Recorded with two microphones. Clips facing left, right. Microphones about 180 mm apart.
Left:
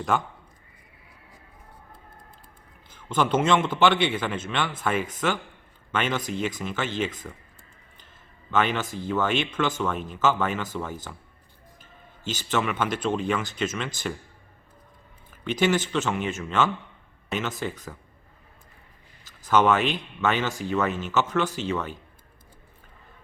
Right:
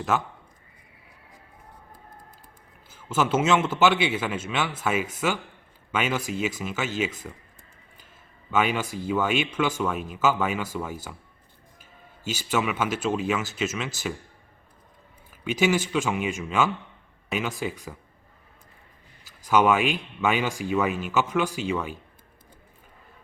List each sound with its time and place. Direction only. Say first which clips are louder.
0.1 s speech: even; 5° right (ahead or behind)
2.9 s speech: even; 5° right (ahead or behind)
8.4 s speech: even; 10° right (ahead or behind)
15.3 s speech: even; 10° right (ahead or behind)
19.2 s speech: even; 10° right (ahead or behind)